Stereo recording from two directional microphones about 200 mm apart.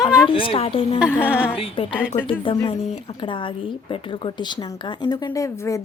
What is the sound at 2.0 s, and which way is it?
Speech, 10° left (ahead or behind).